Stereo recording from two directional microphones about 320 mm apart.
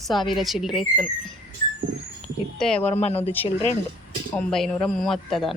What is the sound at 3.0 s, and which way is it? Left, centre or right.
Speech, centre.